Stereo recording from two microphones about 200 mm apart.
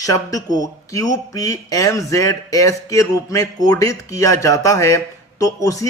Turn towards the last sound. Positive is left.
turn(degrees=15)  # may be behind; listen again after turning